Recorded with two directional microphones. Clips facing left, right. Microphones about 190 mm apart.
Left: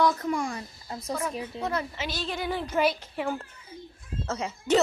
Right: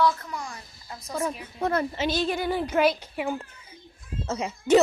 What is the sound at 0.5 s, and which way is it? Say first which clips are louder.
Speech: left 6 dB; 30° left (ahead or behind).